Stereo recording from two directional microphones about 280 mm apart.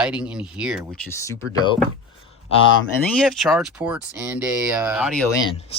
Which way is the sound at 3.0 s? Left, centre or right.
Centre.